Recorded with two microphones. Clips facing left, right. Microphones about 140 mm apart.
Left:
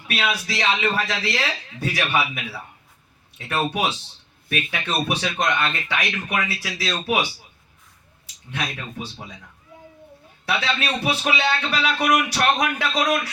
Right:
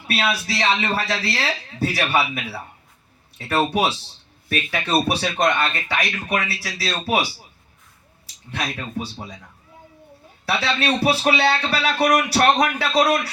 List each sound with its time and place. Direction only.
0.1 s speech: 35° right (ahead or behind)
8.4 s speech: 35° right (ahead or behind)
10.4 s speech: 35° right (ahead or behind)